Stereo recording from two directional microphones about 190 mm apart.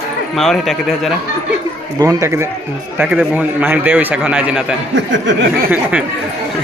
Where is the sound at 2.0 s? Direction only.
15° right (ahead or behind).